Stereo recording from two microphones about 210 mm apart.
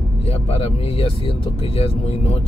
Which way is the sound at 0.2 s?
30° left (ahead or behind).